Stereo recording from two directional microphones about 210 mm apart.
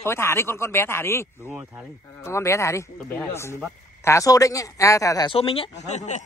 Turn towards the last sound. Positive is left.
turn(degrees=35)  # may be behind; listen again after turning